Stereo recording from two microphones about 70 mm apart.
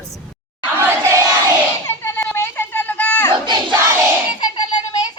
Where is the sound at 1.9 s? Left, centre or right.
Left.